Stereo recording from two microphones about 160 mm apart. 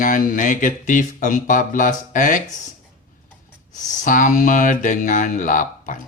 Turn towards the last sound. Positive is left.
turn(degrees=55)  # may be behind; listen again after turning